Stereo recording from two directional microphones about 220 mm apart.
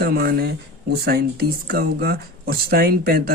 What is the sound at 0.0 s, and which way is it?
Speech, 45° right (ahead or behind).